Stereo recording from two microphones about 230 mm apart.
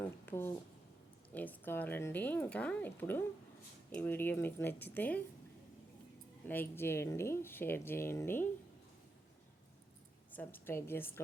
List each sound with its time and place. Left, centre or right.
0.3 s speech: centre
6.4 s speech: centre
10.3 s speech: centre